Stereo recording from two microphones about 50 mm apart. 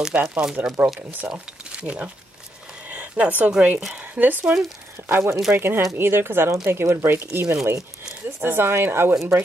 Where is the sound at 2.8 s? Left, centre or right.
Right.